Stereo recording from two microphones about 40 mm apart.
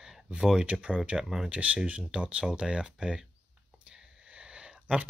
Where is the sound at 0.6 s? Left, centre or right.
Right.